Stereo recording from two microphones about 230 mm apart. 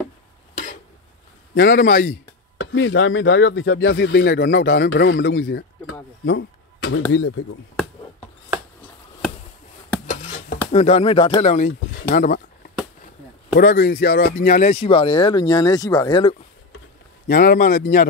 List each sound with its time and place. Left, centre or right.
1.5 s speech: left
2.5 s speech: left
6.2 s a sound: left
7.1 s speech: left
10.7 s speech: left
12.0 s speech: left
13.6 s speech: left
17.3 s speech: left